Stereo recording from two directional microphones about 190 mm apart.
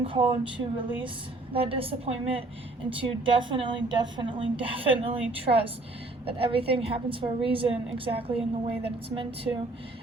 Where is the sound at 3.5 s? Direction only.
25° right (ahead or behind).